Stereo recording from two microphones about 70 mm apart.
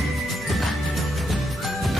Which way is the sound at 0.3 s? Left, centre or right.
Centre.